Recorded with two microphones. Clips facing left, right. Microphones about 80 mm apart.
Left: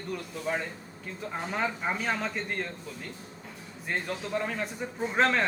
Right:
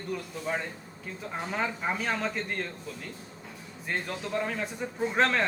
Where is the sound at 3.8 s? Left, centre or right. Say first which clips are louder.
Left 1 dB; centre.